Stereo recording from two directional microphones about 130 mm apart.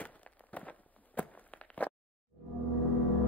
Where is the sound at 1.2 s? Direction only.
10° left (ahead or behind).